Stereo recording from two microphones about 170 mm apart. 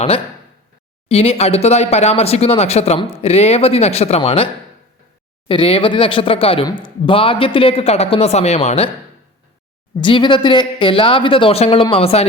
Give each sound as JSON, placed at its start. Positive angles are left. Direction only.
{"t": 1.0, "sound": "speech", "side_deg": 35}
{"t": 5.5, "sound": "speech", "side_deg": 30}
{"t": 10.0, "sound": "speech", "side_deg": 30}